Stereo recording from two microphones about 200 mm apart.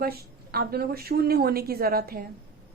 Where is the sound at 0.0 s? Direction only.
50° right (ahead or behind).